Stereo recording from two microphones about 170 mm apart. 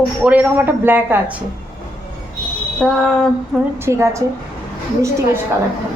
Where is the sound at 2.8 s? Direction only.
5° left (ahead or behind).